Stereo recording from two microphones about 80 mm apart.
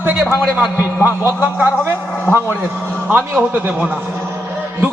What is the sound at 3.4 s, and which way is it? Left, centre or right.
Speech, right.